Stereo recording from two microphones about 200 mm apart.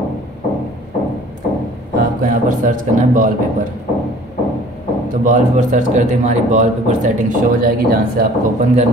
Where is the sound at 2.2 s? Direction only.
40° right (ahead or behind).